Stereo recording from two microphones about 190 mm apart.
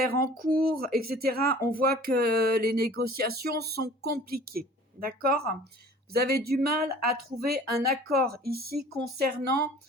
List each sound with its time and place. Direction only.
0.0 s speech: 50° right (ahead or behind)